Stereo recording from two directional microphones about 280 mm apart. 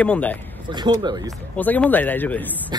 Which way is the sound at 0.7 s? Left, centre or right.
Centre.